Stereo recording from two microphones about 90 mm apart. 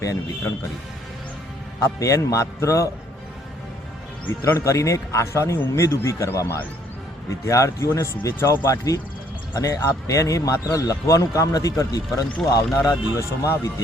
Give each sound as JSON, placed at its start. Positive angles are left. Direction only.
{"t": 0.0, "sound": "a man's voice", "side_deg": 40}
{"t": 1.8, "sound": "a man's voice", "side_deg": 35}
{"t": 4.5, "sound": "a man's voice", "side_deg": 35}